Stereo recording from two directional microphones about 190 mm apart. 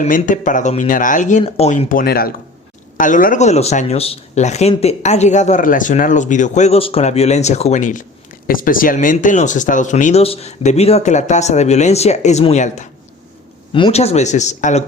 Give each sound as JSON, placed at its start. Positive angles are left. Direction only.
{"t": 0.0, "sound": "speech", "side_deg": 40}